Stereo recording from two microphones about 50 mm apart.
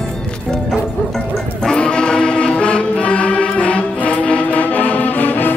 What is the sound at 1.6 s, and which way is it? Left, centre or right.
Music, centre.